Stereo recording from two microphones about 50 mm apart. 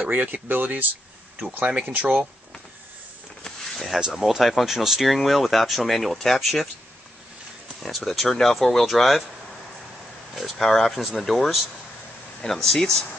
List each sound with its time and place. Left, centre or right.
0.1 s speech: right
1.9 s speech: right
3.4 s a sound: centre
4.1 s speech: centre
7.8 s speech: centre
10.3 s speech: centre